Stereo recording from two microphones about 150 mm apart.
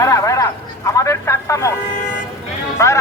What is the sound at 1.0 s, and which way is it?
Vehicle, 20° left (ahead or behind).